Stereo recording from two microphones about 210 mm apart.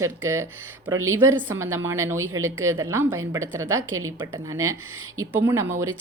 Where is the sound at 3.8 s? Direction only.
75° right (ahead or behind).